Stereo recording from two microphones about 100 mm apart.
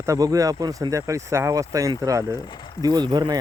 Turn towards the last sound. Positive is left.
turn(degrees=-45)  # may be behind; listen again after turning